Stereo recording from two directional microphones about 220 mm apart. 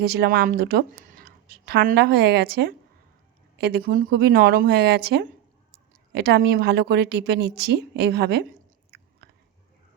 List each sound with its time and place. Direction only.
0.0 s speech: 45° right (ahead or behind)